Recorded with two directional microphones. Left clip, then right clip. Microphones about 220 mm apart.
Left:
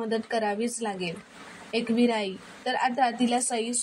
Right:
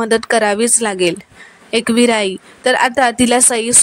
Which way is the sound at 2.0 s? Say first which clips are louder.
Right 13 dB; 45° right (ahead or behind).